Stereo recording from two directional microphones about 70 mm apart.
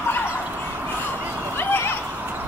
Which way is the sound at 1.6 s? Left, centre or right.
Left.